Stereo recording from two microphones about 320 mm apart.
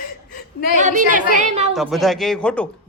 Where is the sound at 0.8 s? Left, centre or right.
Right.